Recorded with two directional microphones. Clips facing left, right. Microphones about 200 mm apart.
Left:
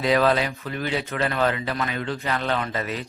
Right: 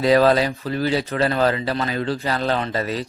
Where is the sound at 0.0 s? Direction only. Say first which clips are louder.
Right 5 dB; 40° right (ahead or behind).